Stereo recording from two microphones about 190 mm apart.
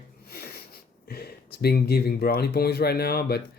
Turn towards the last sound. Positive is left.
turn(degrees=55)  # may be behind; listen again after turning